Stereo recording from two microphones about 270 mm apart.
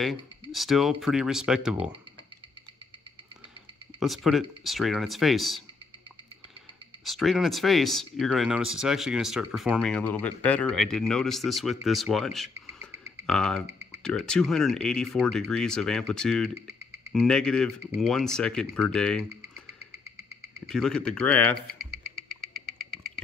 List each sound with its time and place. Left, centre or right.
0.0 s speech: centre
4.0 s speech: centre
7.1 s speech: centre
20.6 s speech: centre
22.0 s a sound: right